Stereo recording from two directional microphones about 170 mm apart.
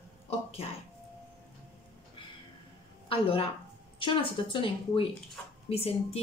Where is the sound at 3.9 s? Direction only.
30° left (ahead or behind).